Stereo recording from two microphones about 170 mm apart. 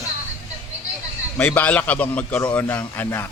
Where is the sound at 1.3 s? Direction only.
10° left (ahead or behind).